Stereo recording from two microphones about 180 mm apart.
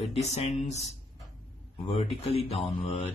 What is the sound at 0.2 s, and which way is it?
Speech, 35° left (ahead or behind).